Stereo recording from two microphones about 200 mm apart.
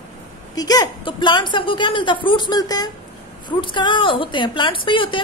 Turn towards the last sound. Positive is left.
turn(degrees=25)  # may be behind; listen again after turning